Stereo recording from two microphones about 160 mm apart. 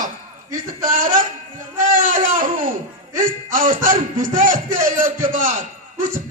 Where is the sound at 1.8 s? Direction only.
55° right (ahead or behind).